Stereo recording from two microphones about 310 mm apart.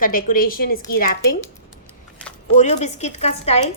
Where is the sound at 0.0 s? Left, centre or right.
Left.